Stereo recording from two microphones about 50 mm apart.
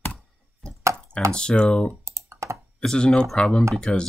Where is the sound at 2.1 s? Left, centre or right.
Right.